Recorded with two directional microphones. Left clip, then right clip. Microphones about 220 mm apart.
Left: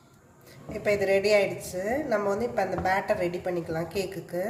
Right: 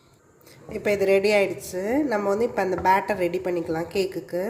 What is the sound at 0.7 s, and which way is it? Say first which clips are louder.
A woman's voice: right 3 dB; 35° right (ahead or behind).